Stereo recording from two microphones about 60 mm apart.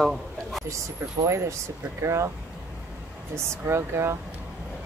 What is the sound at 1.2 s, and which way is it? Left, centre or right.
Speech, right.